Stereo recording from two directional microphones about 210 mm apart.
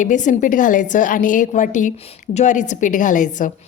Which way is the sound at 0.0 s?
35° left (ahead or behind).